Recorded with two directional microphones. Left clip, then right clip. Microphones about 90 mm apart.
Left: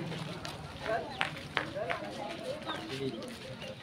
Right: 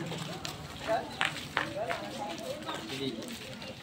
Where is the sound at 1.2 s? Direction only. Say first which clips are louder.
Right 3 dB; 45° right (ahead or behind).